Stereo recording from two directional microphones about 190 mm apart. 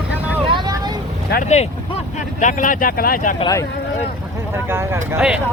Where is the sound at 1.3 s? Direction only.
40° left (ahead or behind).